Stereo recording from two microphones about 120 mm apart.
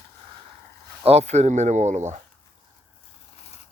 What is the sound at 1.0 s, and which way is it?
Speech, 65° right (ahead or behind).